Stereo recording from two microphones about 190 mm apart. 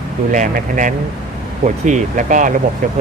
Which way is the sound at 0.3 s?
45° right (ahead or behind).